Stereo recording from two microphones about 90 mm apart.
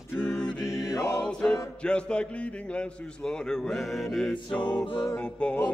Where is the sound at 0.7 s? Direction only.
40° left (ahead or behind).